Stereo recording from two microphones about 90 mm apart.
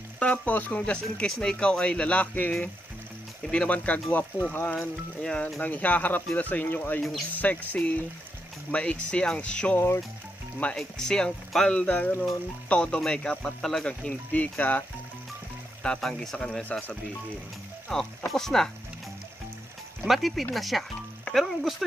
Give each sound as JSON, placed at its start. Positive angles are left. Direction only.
{"t": 0.2, "sound": "speech", "side_deg": 15}
{"t": 4.7, "sound": "speech", "side_deg": 10}
{"t": 15.8, "sound": "speech", "side_deg": 5}
{"t": 17.8, "sound": "speech", "side_deg": 5}
{"t": 20.1, "sound": "speech", "side_deg": 0}